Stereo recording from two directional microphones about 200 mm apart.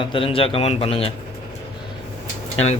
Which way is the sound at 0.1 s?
25° left (ahead or behind).